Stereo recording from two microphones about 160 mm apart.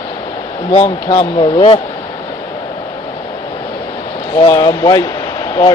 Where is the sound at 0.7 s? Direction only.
40° left (ahead or behind).